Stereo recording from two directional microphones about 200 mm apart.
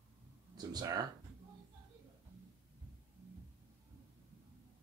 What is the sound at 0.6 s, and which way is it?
Speech, 20° right (ahead or behind).